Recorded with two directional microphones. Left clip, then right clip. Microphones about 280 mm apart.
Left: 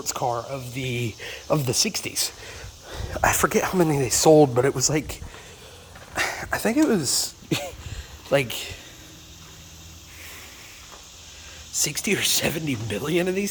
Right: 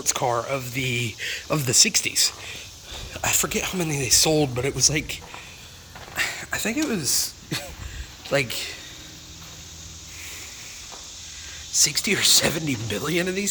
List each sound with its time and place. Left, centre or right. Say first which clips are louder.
0.0 s speech: right 2 dB; centre; by 7.7 s left
8.3 s speech: left 1 dB; centre
11.8 s speech: right 3 dB; centre